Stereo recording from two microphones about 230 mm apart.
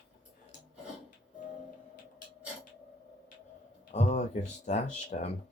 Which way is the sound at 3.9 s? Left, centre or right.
Left.